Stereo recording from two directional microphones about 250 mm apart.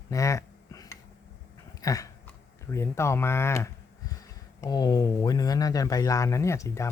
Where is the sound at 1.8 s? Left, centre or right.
Centre.